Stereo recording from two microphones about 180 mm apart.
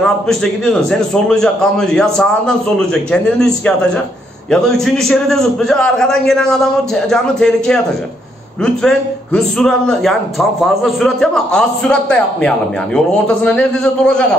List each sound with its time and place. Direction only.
0.0 s a man's voice: 5° left (ahead or behind)
8.8 s a man's voice: 5° left (ahead or behind)